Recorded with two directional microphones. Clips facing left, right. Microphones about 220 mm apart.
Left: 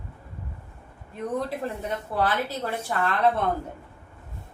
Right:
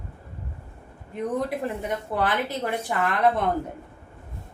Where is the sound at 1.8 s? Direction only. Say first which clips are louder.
Left 1 dB; 15° right (ahead or behind).